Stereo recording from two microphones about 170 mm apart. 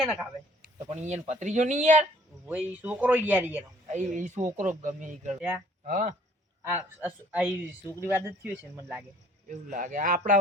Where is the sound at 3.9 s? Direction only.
50° right (ahead or behind).